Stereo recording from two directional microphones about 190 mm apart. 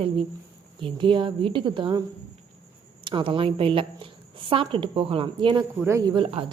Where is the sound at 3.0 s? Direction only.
25° right (ahead or behind).